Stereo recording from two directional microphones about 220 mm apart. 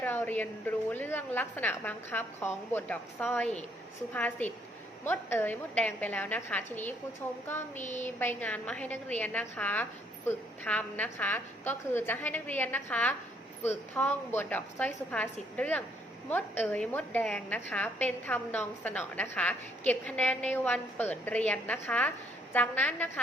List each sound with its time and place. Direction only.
0.0 s a woman's voice: 10° left (ahead or behind)
7.8 s a sound: 35° left (ahead or behind)
8.0 s a woman's voice: 10° left (ahead or behind)